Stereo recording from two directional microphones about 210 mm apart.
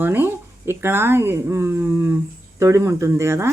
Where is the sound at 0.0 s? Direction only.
10° right (ahead or behind).